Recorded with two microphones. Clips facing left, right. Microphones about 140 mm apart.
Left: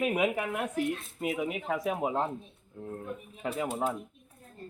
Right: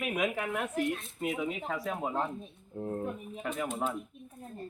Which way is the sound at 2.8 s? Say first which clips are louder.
Right 5 dB; 30° right (ahead or behind).